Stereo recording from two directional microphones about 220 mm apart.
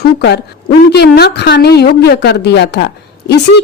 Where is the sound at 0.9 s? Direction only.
45° left (ahead or behind).